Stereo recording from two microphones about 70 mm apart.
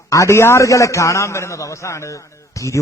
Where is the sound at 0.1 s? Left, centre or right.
Left.